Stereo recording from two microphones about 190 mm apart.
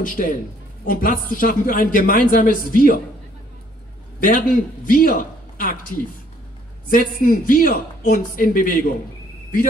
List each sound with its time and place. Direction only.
0.0 s a man's voice: 45° left (ahead or behind)
4.2 s a man's voice: 45° left (ahead or behind)